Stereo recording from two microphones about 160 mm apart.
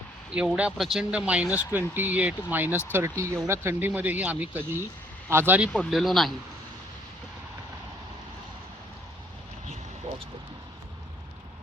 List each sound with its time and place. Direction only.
0.3 s speech: 5° right (ahead or behind)
5.7 s speech: centre (ahead or behind)